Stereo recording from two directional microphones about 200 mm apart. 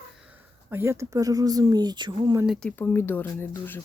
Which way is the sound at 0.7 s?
10° right (ahead or behind).